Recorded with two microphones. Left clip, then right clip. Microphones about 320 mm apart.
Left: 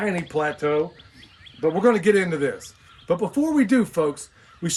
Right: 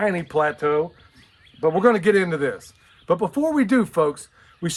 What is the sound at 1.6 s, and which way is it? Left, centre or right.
Speech, centre.